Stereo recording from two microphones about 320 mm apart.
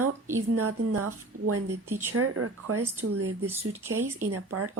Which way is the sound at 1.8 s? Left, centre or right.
Centre.